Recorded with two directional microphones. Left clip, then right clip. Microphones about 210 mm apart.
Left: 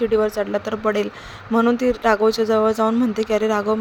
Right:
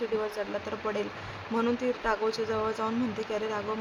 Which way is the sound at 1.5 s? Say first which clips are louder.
Left 11 dB; 35° left (ahead or behind).